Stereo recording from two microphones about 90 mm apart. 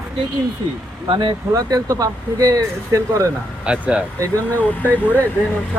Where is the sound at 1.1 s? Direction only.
45° right (ahead or behind).